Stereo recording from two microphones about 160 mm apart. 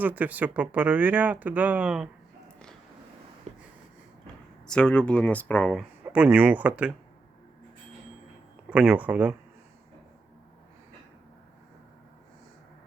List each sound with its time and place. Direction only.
0.0 s speech: 10° right (ahead or behind)
3.5 s a sound: 45° right (ahead or behind)
4.6 s speech: 5° left (ahead or behind)
6.1 s speech: 10° right (ahead or behind)
8.7 s speech: 10° right (ahead or behind)